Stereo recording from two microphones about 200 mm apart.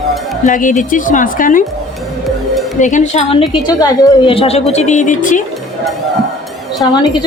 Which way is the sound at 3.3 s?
25° left (ahead or behind).